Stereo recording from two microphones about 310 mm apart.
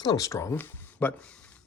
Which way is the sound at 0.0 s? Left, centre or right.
Centre.